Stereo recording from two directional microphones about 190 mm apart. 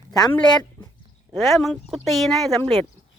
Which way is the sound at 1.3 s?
Centre (ahead or behind).